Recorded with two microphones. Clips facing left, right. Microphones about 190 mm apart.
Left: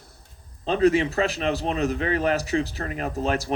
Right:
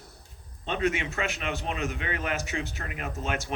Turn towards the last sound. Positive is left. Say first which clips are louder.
# left 7 dB
turn(degrees=35)  # may be behind; listen again after turning